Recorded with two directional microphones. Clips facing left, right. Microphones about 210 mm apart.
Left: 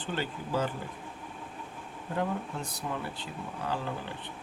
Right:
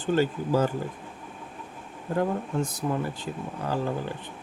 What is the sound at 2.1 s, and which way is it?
Speech, 45° right (ahead or behind).